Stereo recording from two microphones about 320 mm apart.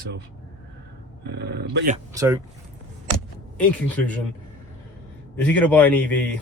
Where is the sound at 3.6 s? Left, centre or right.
Centre.